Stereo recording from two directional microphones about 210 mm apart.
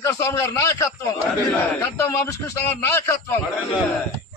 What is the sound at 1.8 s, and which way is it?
A man's voice, 15° left (ahead or behind).